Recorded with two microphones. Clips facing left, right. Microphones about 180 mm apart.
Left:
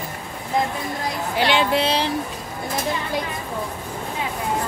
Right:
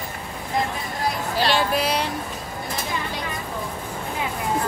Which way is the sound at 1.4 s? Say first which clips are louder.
Left 3 dB; 20° left (ahead or behind).